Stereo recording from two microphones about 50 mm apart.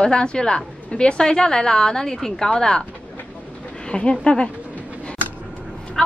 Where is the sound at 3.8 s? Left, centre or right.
Centre.